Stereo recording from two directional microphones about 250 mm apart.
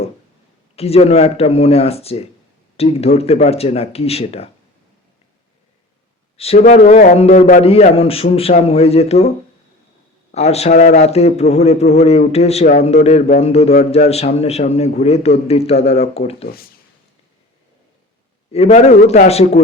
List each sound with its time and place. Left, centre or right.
0.8 s a man's voice: left
6.3 s a man's voice: left
10.3 s a man's voice: left
18.5 s a man's voice: left